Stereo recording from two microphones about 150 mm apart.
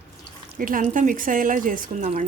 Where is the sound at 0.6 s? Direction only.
65° right (ahead or behind).